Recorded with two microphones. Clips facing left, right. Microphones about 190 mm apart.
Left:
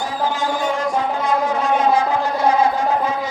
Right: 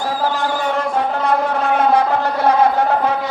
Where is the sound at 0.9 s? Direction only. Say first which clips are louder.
Right 2 dB; 60° right (ahead or behind).